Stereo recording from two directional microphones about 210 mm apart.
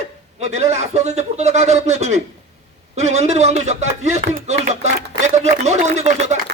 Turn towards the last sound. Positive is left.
turn(degrees=-35)  # may be behind; listen again after turning